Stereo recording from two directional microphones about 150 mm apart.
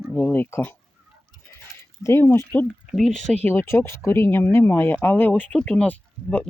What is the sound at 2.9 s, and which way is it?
Speech, centre (ahead or behind).